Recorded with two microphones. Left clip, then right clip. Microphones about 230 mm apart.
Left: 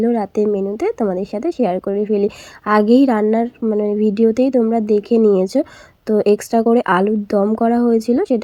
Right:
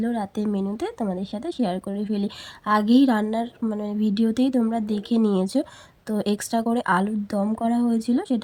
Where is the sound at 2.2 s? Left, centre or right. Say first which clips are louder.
Left 7 dB; right.